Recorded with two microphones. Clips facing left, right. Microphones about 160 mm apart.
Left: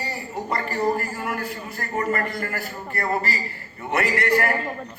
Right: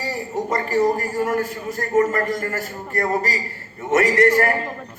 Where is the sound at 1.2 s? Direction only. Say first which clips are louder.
Right 7 dB; 45° right (ahead or behind).